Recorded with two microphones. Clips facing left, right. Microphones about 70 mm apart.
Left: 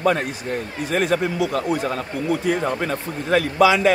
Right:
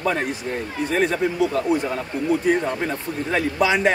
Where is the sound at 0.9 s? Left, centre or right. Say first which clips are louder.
Left 1 dB; left.